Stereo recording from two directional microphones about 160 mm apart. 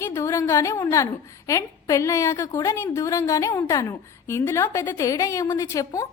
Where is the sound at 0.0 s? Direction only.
20° left (ahead or behind).